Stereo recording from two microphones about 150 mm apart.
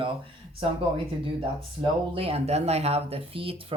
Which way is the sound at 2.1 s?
40° right (ahead or behind).